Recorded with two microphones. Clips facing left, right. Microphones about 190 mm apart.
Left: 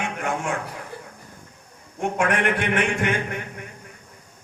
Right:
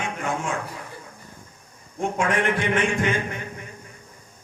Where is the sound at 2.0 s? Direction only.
65° left (ahead or behind).